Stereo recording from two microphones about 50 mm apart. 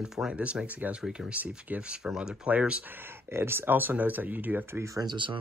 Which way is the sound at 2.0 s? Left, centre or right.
Centre.